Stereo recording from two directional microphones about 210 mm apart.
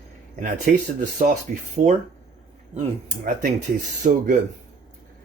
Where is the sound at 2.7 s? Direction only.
40° right (ahead or behind).